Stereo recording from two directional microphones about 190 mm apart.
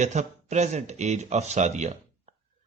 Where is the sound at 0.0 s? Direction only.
40° right (ahead or behind).